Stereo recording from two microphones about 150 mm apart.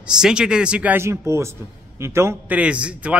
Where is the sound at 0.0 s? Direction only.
5° right (ahead or behind).